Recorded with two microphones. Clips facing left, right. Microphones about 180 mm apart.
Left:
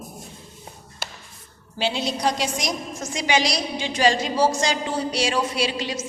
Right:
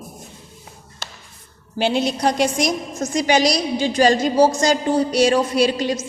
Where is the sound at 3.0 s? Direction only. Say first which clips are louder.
Right 6 dB; 40° right (ahead or behind).